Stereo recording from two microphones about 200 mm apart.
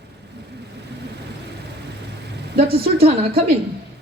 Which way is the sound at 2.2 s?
50° right (ahead or behind).